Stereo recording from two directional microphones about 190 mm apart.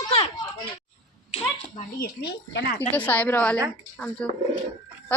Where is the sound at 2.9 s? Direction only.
10° left (ahead or behind).